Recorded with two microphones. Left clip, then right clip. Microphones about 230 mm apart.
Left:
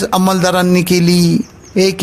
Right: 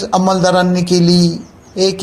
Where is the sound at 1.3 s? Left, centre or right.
Left.